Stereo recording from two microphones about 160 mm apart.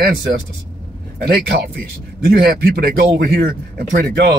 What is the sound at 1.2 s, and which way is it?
Speech, 80° right.